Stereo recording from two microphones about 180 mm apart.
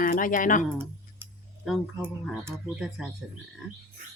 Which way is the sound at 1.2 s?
10° right (ahead or behind).